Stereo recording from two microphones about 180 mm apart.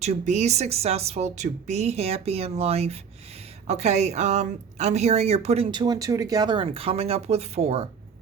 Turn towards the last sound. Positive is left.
turn(degrees=-35)  # may be behind; listen again after turning